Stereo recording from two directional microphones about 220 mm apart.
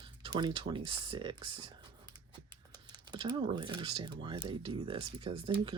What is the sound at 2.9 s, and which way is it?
Speech, 20° right (ahead or behind).